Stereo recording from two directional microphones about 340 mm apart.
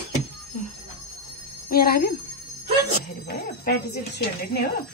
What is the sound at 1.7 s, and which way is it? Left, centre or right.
Speech, left.